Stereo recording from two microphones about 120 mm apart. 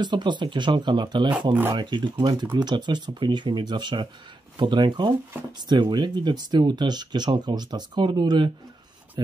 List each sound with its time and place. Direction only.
0.0 s speech: 40° right (ahead or behind)
1.5 s speech: 15° right (ahead or behind)
1.8 s speech: 40° right (ahead or behind)